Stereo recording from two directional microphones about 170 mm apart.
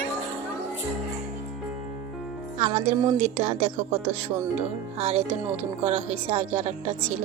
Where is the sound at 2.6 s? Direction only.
45° right (ahead or behind).